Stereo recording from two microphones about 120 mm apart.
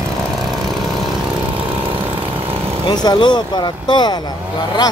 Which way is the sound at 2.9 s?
35° left (ahead or behind).